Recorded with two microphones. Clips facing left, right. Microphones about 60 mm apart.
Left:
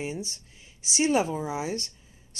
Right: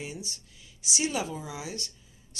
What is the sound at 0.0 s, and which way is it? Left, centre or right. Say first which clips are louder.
Speech: left 6 dB; left.